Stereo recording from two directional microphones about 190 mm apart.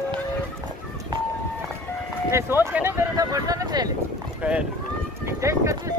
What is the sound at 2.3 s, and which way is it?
Speech, 15° right (ahead or behind).